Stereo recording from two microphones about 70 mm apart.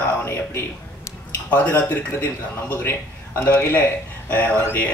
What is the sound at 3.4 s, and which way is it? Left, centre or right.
Speech, left.